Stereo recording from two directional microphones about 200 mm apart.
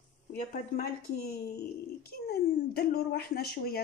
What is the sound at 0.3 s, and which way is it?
Speech, 50° left (ahead or behind).